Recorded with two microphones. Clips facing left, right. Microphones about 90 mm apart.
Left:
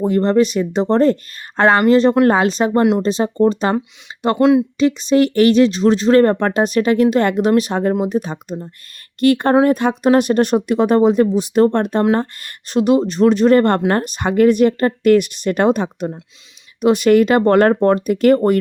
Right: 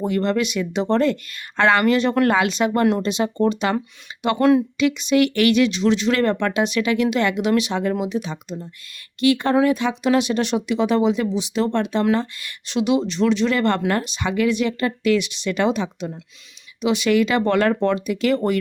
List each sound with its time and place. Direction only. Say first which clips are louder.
0.0 s speech: left 6 dB; 35° left (ahead or behind)
4.4 s speech: left 3 dB; 20° left (ahead or behind)
4.8 s speech: left 4 dB; 35° left (ahead or behind)